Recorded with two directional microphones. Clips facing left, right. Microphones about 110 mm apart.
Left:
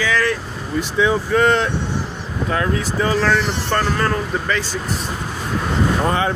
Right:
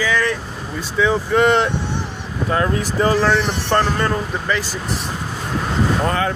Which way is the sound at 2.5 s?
30° right (ahead or behind).